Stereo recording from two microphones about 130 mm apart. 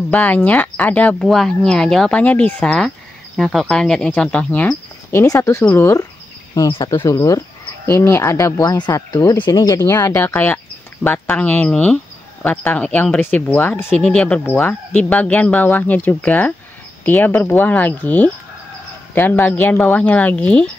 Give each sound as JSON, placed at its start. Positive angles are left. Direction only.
{"t": 0.1, "sound": "speech", "side_deg": 10}
{"t": 5.2, "sound": "speech", "side_deg": 25}
{"t": 6.7, "sound": "speech", "side_deg": 30}